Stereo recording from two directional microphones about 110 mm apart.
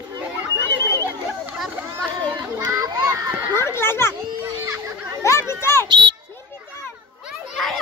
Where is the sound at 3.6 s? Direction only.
20° left (ahead or behind).